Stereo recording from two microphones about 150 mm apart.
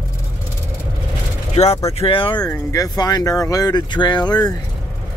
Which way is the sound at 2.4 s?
25° left (ahead or behind).